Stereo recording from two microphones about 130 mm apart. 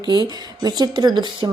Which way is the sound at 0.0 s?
35° right (ahead or behind).